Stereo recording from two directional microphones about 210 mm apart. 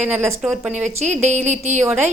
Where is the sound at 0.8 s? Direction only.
35° right (ahead or behind).